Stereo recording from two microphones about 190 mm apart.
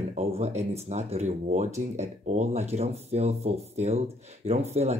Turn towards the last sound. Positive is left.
turn(degrees=-35)  # may be behind; listen again after turning